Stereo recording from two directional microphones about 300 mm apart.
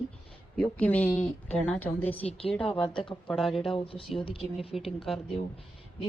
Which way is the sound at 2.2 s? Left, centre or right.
Centre.